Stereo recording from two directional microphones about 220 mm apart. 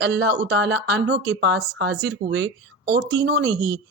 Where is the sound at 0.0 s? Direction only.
50° right (ahead or behind).